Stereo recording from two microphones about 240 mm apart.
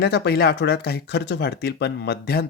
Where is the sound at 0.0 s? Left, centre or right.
Left.